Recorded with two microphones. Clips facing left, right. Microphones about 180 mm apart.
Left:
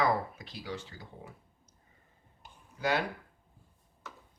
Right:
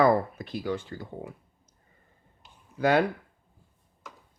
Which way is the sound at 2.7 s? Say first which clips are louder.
Right 8 dB; 55° right (ahead or behind).